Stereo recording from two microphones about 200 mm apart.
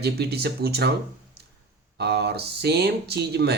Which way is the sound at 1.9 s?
55° right (ahead or behind).